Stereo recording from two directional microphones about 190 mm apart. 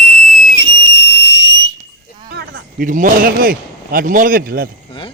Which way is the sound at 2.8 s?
45° right (ahead or behind).